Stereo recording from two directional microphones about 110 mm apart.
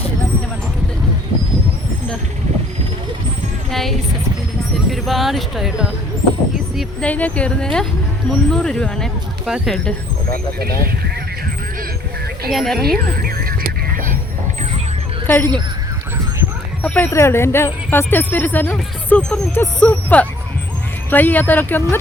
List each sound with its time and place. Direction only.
3.7 s a sound: centre (ahead or behind)
4.9 s speech: centre (ahead or behind)
7.0 s speech: 15° left (ahead or behind)
12.5 s speech: centre (ahead or behind)
15.3 s speech: 20° left (ahead or behind)
16.8 s speech: 15° left (ahead or behind)
17.1 s speech: 25° left (ahead or behind)